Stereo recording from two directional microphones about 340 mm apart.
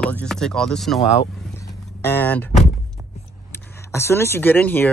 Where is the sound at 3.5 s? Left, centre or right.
Centre.